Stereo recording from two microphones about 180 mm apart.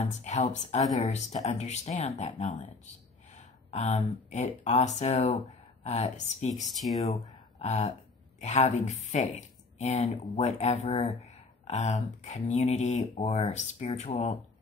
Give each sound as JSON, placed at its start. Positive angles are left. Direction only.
{"t": 0.0, "sound": "speech", "side_deg": 40}
{"t": 6.8, "sound": "speech", "side_deg": 0}
{"t": 7.5, "sound": "speech", "side_deg": 35}